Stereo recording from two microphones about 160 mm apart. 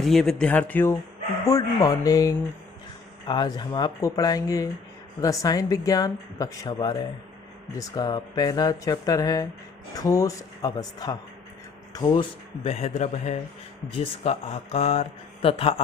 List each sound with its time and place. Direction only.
0.0 s speech: centre (ahead or behind)
1.5 s speech: 20° left (ahead or behind)
12.6 s a man's voice: 40° left (ahead or behind)